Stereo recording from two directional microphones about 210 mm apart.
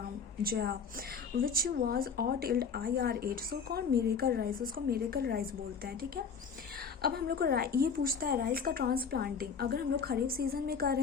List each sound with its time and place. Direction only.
0.4 s speech: 45° right (ahead or behind)